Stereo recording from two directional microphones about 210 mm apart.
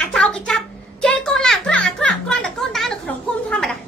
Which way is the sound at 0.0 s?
5° left (ahead or behind).